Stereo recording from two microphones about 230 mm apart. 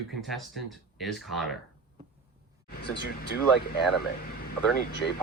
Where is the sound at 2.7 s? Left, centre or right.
Left.